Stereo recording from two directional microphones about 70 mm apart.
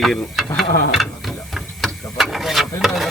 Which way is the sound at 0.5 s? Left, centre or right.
Centre.